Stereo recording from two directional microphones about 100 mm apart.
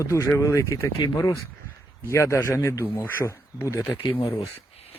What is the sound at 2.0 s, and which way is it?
Speech, 30° left (ahead or behind).